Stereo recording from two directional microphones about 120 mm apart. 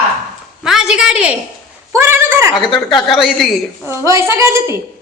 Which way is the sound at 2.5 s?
40° left (ahead or behind).